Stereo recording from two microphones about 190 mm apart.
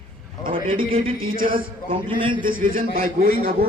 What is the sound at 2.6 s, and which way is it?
Speech, 50° right (ahead or behind).